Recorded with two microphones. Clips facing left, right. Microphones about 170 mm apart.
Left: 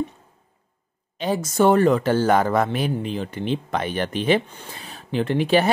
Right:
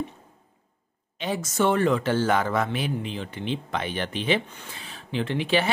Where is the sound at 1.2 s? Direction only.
40° left (ahead or behind).